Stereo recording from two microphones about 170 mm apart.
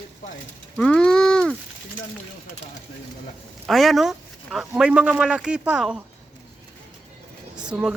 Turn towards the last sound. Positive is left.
turn(degrees=-5)  # may be behind; listen again after turning